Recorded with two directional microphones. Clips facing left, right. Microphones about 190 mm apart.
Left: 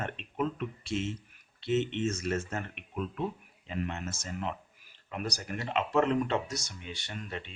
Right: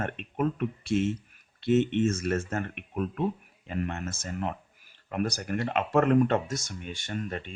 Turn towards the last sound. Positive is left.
turn(degrees=-45)  # may be behind; listen again after turning